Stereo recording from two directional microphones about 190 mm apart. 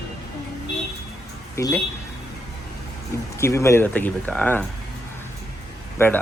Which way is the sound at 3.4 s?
15° left (ahead or behind).